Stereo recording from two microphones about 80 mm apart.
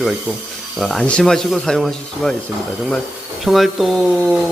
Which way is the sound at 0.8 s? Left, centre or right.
Centre.